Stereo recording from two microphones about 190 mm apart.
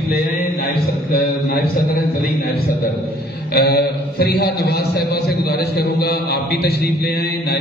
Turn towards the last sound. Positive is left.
turn(degrees=55)  # may be behind; listen again after turning